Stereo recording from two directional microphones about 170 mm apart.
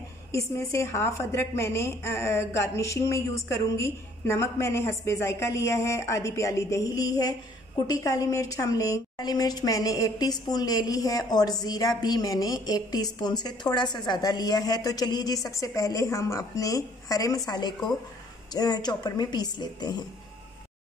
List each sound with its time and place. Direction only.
0.3 s a woman's voice: 20° left (ahead or behind)